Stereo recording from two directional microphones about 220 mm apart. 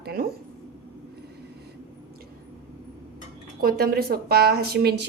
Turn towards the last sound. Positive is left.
turn(degrees=-45)  # may be behind; listen again after turning